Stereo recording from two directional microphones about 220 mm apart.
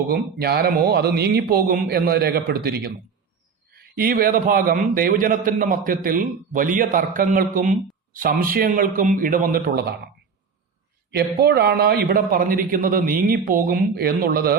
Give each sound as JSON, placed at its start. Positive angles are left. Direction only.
{"t": 0.1, "sound": "a man's voice", "side_deg": -45}
{"t": 11.1, "sound": "a man's voice", "side_deg": -45}